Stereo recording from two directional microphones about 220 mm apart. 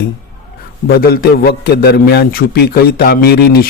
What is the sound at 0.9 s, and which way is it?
A man's voice, 45° left (ahead or behind).